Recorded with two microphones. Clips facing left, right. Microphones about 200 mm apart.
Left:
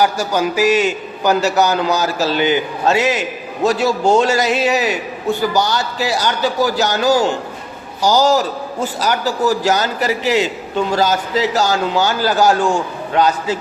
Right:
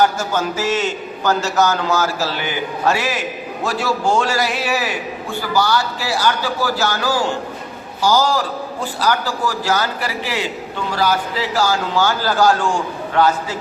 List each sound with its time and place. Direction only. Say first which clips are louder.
0.0 s a man's voice: left 1 dB; 15° left (ahead or behind)
9.6 s a man's voice: left 4 dB; 20° left (ahead or behind)